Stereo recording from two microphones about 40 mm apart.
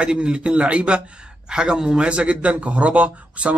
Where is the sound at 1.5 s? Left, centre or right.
Centre.